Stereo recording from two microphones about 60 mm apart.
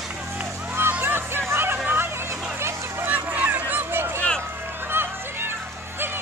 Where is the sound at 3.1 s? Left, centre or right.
Right.